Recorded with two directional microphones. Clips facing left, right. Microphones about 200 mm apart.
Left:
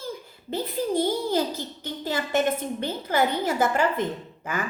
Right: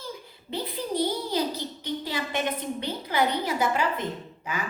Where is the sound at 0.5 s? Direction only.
50° left (ahead or behind).